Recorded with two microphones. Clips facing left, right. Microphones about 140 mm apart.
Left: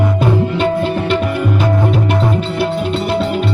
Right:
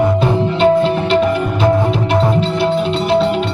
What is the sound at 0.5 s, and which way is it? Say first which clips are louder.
Music: right 4 dB; 30° right (ahead or behind).